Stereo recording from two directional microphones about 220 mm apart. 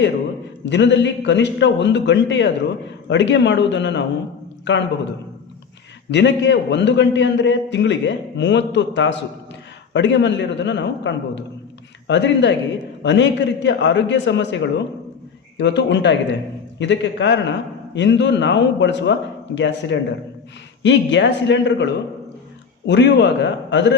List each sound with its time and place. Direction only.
0.6 s a man's voice: 55° left (ahead or behind)
6.1 s a man's voice: 55° left (ahead or behind)